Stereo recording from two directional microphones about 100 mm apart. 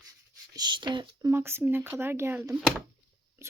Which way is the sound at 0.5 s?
50° right (ahead or behind).